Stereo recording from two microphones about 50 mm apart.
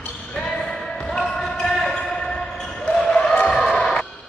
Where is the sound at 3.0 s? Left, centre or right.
Centre.